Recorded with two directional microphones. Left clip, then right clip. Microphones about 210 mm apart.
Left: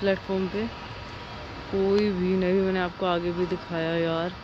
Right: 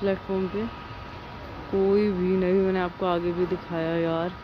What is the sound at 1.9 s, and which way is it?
Speech, 10° right (ahead or behind).